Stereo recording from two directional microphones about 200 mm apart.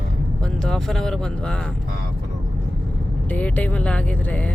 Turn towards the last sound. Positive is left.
turn(degrees=5)  # may be behind; listen again after turning